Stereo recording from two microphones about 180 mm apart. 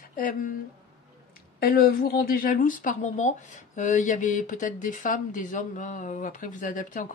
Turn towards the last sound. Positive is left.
turn(degrees=45)  # may be behind; listen again after turning